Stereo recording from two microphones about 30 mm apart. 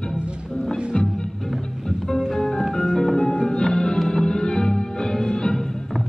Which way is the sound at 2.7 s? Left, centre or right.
Centre.